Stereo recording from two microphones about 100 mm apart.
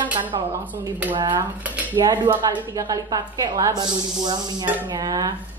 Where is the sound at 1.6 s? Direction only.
15° right (ahead or behind).